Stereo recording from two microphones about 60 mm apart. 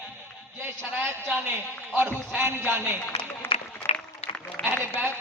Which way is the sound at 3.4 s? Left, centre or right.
Left.